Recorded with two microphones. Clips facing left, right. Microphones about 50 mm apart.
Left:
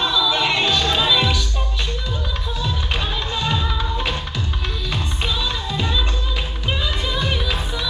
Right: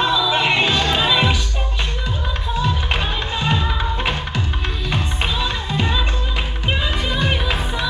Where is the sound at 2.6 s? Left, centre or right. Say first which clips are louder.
Right 2 dB; right.